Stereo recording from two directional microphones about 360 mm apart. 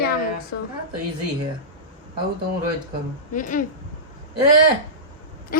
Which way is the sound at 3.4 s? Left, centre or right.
Left.